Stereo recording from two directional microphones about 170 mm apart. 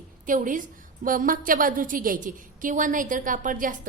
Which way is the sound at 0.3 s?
50° right (ahead or behind).